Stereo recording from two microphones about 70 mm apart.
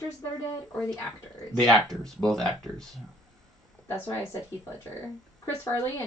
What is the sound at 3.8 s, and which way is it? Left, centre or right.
Speech, left.